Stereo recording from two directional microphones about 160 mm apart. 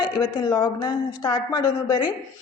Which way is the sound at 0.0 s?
30° left (ahead or behind).